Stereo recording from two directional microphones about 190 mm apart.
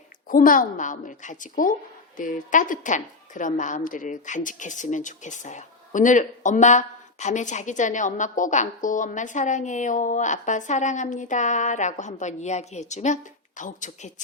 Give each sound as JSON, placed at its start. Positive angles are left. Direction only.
{"t": 0.3, "sound": "a woman's voice", "side_deg": 45}